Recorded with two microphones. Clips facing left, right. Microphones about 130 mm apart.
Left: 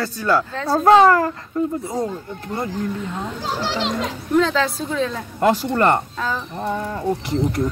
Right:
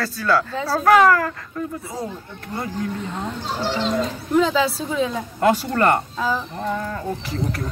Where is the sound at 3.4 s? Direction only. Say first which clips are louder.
Even; 90° left.